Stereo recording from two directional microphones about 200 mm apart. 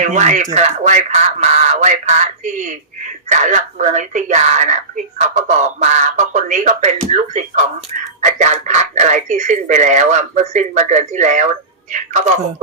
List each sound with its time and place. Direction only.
0.0 s speech: 35° right (ahead or behind)